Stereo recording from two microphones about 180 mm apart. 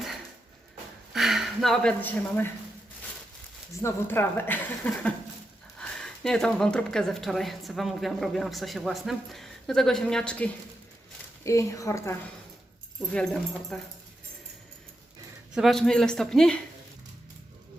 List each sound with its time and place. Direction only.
1.1 s speech: centre (ahead or behind)
3.8 s a woman's voice: 15° left (ahead or behind)
11.4 s a woman's voice: 15° left (ahead or behind)
13.1 s speech: 5° left (ahead or behind)
15.5 s speech: centre (ahead or behind)